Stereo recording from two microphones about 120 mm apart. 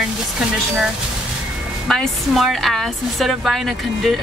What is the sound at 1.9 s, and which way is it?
A woman's voice, centre (ahead or behind).